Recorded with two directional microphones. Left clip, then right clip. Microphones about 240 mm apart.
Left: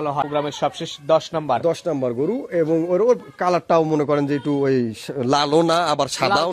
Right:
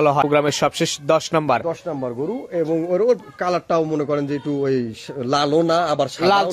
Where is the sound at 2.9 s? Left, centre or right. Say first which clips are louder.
Even; left.